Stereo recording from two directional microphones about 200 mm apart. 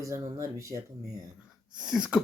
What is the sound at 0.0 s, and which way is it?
Speech, 15° right (ahead or behind).